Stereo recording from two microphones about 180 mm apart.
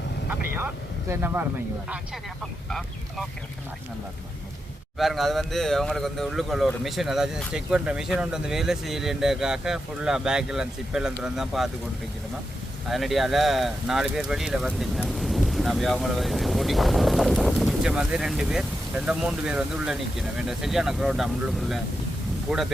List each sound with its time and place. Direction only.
0.3 s speech: 10° right (ahead or behind)
2.6 s speech: centre (ahead or behind)
4.9 s speech: centre (ahead or behind)
12.9 s speech: centre (ahead or behind)